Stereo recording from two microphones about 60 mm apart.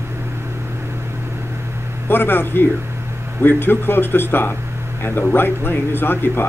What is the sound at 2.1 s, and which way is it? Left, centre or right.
Speech, left.